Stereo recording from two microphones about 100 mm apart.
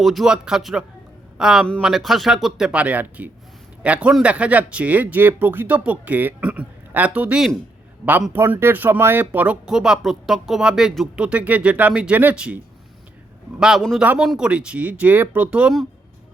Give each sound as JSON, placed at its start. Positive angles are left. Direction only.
{"t": 0.0, "sound": "speech", "side_deg": 0}
{"t": 8.3, "sound": "speech", "side_deg": -20}
{"t": 9.6, "sound": "speech", "side_deg": -5}